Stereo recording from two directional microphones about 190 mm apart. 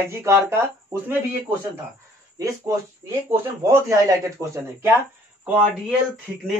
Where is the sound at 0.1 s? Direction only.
15° right (ahead or behind).